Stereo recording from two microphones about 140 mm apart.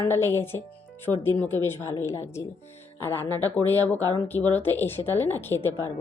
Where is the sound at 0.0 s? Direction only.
15° left (ahead or behind).